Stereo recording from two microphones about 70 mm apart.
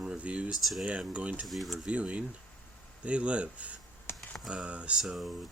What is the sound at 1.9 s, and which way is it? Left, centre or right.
Speech, centre.